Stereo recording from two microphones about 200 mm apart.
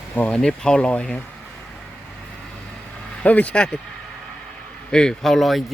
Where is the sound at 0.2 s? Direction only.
5° left (ahead or behind).